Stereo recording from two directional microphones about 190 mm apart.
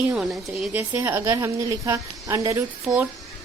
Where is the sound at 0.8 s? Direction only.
15° right (ahead or behind).